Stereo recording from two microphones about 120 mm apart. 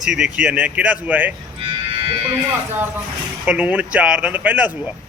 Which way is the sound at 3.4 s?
10° right (ahead or behind).